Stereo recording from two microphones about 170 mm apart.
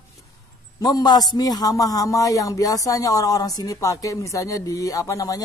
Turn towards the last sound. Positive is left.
turn(degrees=20)  # may be behind; listen again after turning